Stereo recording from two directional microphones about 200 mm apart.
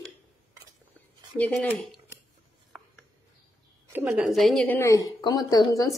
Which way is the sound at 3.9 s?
5° right (ahead or behind).